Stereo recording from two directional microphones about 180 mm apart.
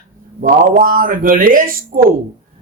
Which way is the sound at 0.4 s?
50° right (ahead or behind).